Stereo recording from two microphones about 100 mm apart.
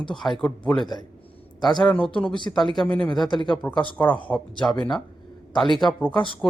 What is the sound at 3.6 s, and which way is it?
Speech, 15° left (ahead or behind).